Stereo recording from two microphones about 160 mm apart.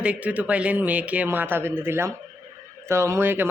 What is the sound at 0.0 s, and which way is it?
A man's voice, 10° right (ahead or behind).